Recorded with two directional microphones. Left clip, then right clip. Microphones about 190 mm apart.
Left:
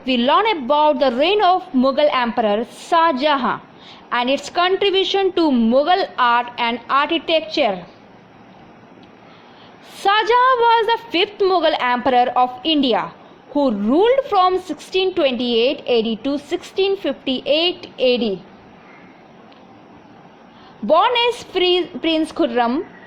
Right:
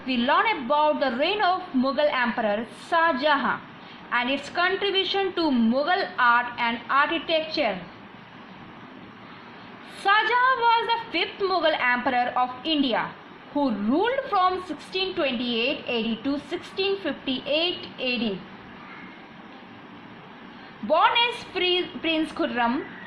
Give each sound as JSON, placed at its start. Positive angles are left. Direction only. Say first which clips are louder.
{"t": 0.0, "sound": "a woman's voice", "louder": "left 6 dB", "side_deg": 60}
{"t": 10.0, "sound": "a woman's voice", "louder": "left 6 dB", "side_deg": 60}
{"t": 20.8, "sound": "a woman's voice", "louder": "left 6 dB", "side_deg": 60}